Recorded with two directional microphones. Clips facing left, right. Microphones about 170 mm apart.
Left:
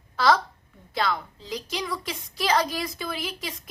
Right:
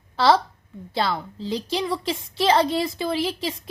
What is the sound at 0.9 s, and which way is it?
A woman's voice, 30° right (ahead or behind).